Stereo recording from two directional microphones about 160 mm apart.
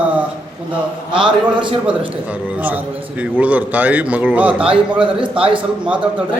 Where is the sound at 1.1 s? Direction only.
30° right (ahead or behind).